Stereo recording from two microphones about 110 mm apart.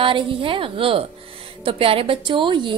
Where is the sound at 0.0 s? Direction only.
50° right (ahead or behind).